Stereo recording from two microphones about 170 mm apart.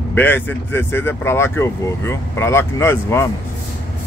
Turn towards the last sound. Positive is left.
turn(degrees=15)  # may be behind; listen again after turning